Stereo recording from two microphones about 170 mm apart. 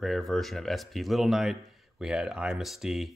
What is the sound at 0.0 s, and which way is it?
Speech, centre (ahead or behind).